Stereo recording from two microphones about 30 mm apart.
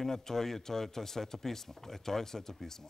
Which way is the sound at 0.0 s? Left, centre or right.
Centre.